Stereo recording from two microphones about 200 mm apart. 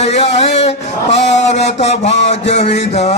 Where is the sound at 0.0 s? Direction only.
30° left (ahead or behind).